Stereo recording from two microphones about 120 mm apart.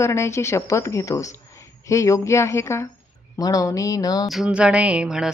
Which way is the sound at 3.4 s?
30° left (ahead or behind).